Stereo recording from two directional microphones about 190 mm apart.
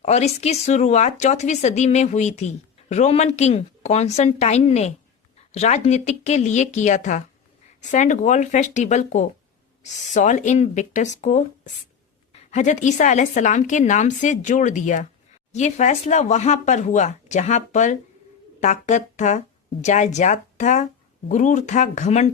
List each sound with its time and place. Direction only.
0.0 s speech: 35° left (ahead or behind)